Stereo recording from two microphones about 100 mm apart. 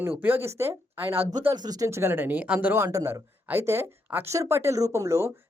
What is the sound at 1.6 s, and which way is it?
Speech, 40° right (ahead or behind).